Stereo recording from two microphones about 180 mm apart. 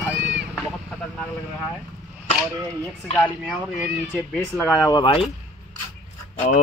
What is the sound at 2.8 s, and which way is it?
Speech, 10° left (ahead or behind).